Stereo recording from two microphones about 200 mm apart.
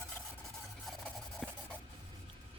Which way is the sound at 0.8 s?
Centre (ahead or behind).